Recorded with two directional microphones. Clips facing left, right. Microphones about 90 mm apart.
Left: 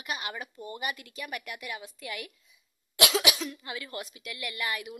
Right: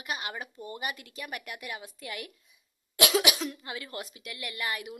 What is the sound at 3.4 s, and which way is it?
A woman's voice, 25° right (ahead or behind).